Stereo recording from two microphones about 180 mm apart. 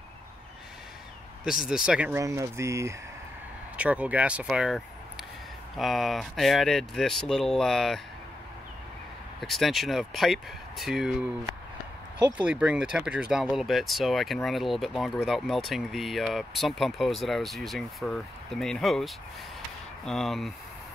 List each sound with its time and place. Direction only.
1.7 s speech: 5° right (ahead or behind)
9.4 s speech: centre (ahead or behind)
12.4 s speech: 5° right (ahead or behind)